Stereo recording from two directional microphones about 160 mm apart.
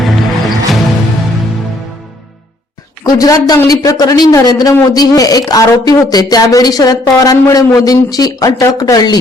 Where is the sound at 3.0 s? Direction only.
20° left (ahead or behind).